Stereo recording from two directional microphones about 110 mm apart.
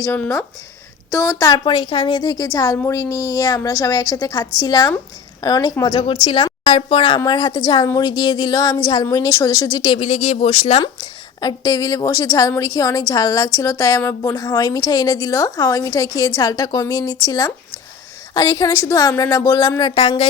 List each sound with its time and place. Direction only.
0.0 s speech: 25° left (ahead or behind); by 2.2 s 50° left (ahead or behind)
2.2 s a woman's voice: 35° left (ahead or behind)
5.8 s speech: 50° left (ahead or behind)
7.3 s a woman's voice: 40° left (ahead or behind)
10.0 s speech: 70° left (ahead or behind)
11.3 s a woman's voice: 35° left (ahead or behind)
19.8 s speech: 55° left (ahead or behind)